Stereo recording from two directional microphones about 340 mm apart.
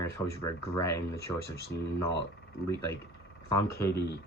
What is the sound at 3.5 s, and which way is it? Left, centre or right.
Speech, centre.